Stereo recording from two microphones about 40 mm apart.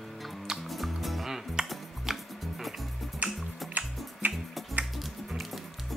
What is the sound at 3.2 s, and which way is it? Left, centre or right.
Music, right.